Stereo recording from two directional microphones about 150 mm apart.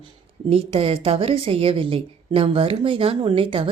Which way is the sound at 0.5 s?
40° right (ahead or behind).